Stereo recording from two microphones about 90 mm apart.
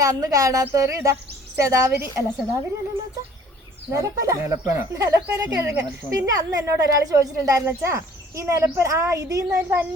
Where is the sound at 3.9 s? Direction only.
35° right (ahead or behind).